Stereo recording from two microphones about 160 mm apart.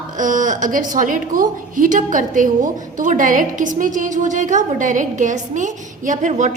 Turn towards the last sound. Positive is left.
turn(degrees=-50)  # may be behind; listen again after turning